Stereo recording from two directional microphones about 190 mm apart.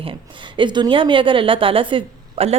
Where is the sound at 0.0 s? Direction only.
25° right (ahead or behind).